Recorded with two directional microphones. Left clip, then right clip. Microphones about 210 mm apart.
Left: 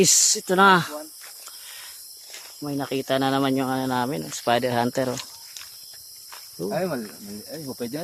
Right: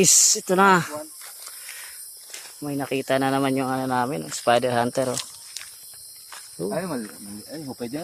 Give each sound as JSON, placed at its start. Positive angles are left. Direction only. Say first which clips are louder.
{"t": 0.0, "sound": "speech", "louder": "right 1 dB", "side_deg": 10}
{"t": 2.6, "sound": "speech", "louder": "right 1 dB", "side_deg": 0}
{"t": 6.6, "sound": "speech", "louder": "left 1 dB", "side_deg": 15}